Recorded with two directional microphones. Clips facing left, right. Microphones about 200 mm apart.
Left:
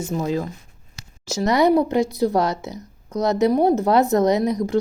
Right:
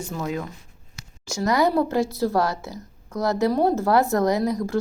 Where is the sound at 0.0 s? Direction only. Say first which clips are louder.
Left 5 dB; 25° left (ahead or behind).